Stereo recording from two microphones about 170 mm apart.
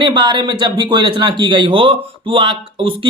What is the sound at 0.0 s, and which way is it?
Speech, 25° right (ahead or behind).